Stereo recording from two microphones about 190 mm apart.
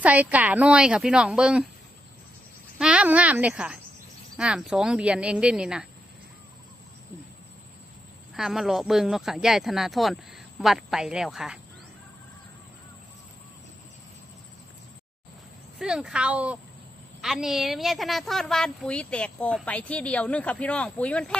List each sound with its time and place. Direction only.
0.0 s a woman's voice: 10° right (ahead or behind)
2.8 s a woman's voice: 5° right (ahead or behind)
8.4 s a woman's voice: centre (ahead or behind)
15.8 s a woman's voice: 5° right (ahead or behind)